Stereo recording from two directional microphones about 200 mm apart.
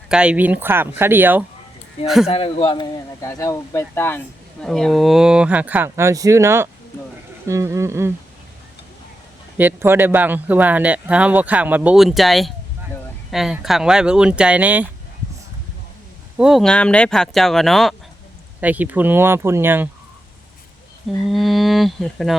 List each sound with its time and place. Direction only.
0.1 s speech: 5° right (ahead or behind)
2.2 s a man's voice: 30° left (ahead or behind); by 8.1 s 15° right (ahead or behind)
9.6 s speech: 10° right (ahead or behind)
16.4 s speech: centre (ahead or behind)
21.2 s speech: centre (ahead or behind)